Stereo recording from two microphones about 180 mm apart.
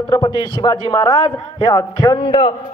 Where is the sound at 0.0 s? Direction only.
25° left (ahead or behind).